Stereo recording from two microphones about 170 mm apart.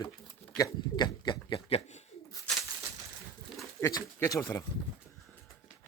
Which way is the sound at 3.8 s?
20° left (ahead or behind).